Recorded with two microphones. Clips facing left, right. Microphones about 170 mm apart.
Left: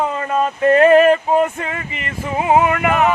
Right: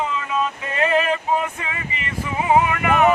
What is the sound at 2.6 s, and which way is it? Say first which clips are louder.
Music: left 5 dB; 50° left (ahead or behind).